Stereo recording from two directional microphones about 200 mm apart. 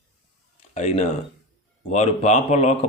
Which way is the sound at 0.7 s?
35° left (ahead or behind).